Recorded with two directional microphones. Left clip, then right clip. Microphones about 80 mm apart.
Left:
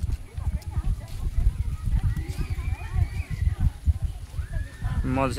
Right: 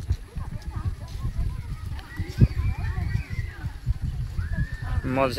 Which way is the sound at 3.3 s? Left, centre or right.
Left.